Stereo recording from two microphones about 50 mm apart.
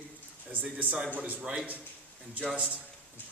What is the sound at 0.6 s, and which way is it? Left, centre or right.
Speech, right.